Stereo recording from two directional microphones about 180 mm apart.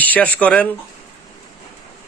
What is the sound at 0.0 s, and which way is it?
Speech, 10° left (ahead or behind).